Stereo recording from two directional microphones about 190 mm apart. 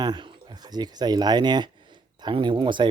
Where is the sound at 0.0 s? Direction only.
25° right (ahead or behind).